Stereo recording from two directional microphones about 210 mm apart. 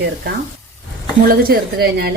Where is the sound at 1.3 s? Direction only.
45° right (ahead or behind).